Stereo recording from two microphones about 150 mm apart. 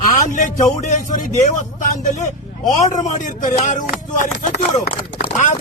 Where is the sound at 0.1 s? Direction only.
60° left (ahead or behind).